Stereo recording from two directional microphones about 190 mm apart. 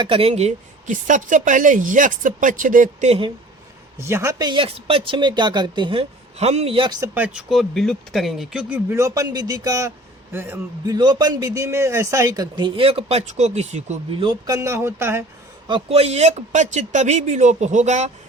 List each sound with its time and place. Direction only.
0.0 s speech: 30° right (ahead or behind)
3.9 s speech: 15° right (ahead or behind)
7.1 s speech: 5° right (ahead or behind)
10.9 s speech: 20° right (ahead or behind)
15.6 s speech: 30° right (ahead or behind)